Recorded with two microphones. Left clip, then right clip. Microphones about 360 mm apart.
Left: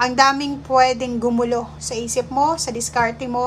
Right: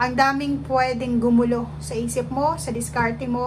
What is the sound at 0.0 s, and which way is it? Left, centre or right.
A woman's voice, centre.